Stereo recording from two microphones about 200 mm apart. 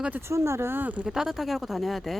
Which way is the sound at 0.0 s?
10° right (ahead or behind).